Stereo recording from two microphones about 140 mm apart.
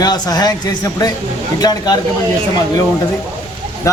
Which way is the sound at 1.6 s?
30° left (ahead or behind).